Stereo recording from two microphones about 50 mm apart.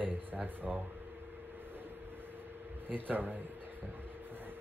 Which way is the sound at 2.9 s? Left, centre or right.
Right.